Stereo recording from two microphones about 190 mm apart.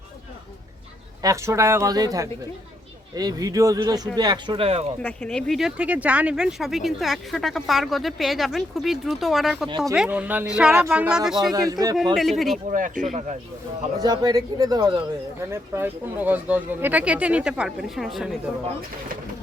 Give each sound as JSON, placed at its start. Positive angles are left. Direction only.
{"t": 1.2, "sound": "speech", "side_deg": -15}
{"t": 5.0, "sound": "speech", "side_deg": 5}
{"t": 11.5, "sound": "speech", "side_deg": -20}
{"t": 12.1, "sound": "speech", "side_deg": 0}
{"t": 12.7, "sound": "speech", "side_deg": -40}
{"t": 14.0, "sound": "speech", "side_deg": -20}